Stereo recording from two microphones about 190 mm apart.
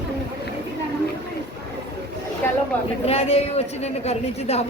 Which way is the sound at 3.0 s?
30° left (ahead or behind).